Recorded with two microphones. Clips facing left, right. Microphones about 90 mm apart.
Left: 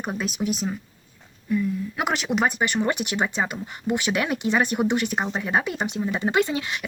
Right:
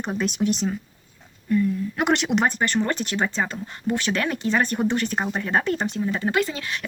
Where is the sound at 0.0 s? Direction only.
5° left (ahead or behind).